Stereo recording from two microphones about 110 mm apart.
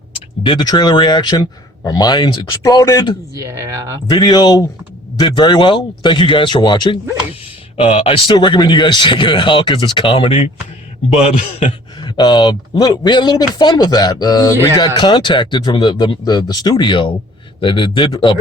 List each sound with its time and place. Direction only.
0.4 s speech: 45° left (ahead or behind)
3.3 s speech: 30° right (ahead or behind)
4.1 s speech: 40° left (ahead or behind)
7.8 s speech: 60° left (ahead or behind)
8.4 s speech: 45° left (ahead or behind)
11.1 s a man's voice: 80° left
11.9 s speech: 45° left (ahead or behind)